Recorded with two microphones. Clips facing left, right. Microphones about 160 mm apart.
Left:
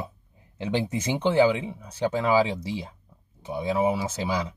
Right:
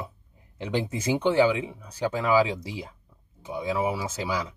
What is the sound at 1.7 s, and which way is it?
Speech, 25° left (ahead or behind).